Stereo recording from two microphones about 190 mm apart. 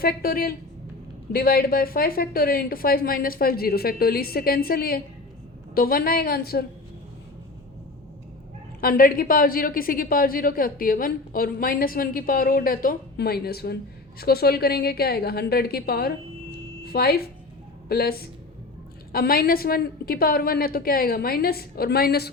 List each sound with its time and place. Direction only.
0.0 s a woman's voice: 50° left (ahead or behind)
8.8 s a woman's voice: 50° left (ahead or behind)